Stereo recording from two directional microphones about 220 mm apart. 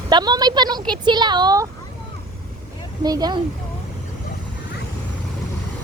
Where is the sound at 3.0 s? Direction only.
20° right (ahead or behind).